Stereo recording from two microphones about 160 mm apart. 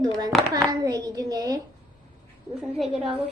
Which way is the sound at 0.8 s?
25° right (ahead or behind).